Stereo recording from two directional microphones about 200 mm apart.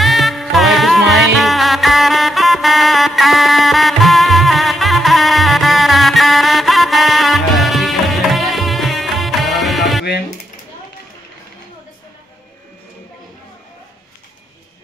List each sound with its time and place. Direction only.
0.0 s music: centre (ahead or behind)